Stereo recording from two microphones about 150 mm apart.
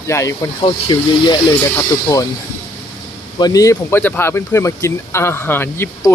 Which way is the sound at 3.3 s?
25° left (ahead or behind).